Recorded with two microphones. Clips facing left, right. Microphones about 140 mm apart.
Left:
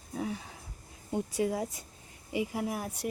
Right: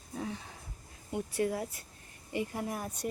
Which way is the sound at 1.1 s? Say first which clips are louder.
Left 2 dB; 15° left (ahead or behind).